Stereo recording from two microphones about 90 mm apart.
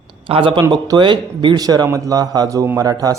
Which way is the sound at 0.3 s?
75° right (ahead or behind).